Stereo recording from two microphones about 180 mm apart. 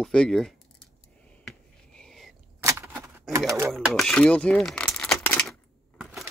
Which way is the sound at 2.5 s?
15° right (ahead or behind).